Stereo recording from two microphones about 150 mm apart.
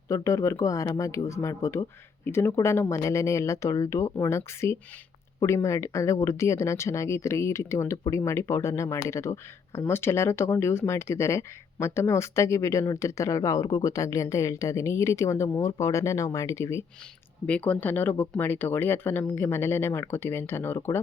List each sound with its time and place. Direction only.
0.1 s speech: 20° left (ahead or behind)